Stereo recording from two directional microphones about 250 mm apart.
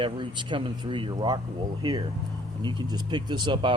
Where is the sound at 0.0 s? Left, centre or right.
Centre.